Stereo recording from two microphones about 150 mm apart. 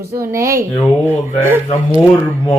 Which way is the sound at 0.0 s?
15° right (ahead or behind).